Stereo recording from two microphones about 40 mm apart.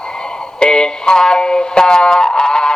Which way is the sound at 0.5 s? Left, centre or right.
Left.